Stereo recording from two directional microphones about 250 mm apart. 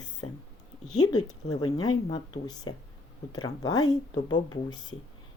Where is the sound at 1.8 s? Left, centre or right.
Centre.